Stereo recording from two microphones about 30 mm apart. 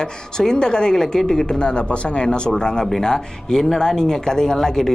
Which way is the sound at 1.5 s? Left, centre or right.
Left.